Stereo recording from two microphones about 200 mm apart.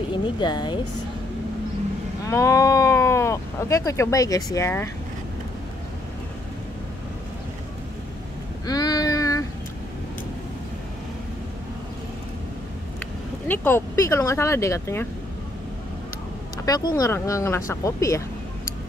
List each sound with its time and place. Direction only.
0.4 s a woman's voice: 20° left (ahead or behind)
2.2 s speech: 15° left (ahead or behind)
8.6 s a sound: 20° left (ahead or behind)
13.5 s speech: 10° left (ahead or behind)
16.6 s speech: 20° left (ahead or behind)